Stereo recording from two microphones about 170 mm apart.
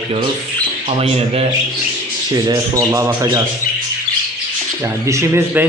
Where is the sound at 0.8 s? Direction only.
35° right (ahead or behind).